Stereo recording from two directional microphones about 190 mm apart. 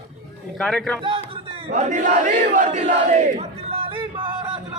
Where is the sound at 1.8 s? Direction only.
40° right (ahead or behind).